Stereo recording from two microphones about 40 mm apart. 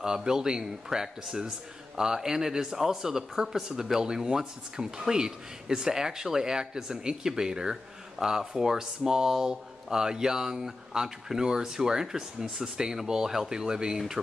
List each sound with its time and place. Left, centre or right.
0.0 s speech: centre